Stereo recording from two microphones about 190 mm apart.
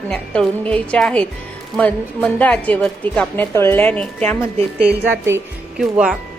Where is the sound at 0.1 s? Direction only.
5° left (ahead or behind).